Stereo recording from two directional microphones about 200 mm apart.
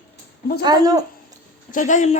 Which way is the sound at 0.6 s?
20° right (ahead or behind).